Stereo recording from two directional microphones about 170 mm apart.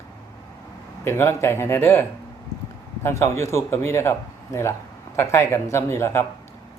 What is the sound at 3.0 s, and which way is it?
Speech, 15° left (ahead or behind).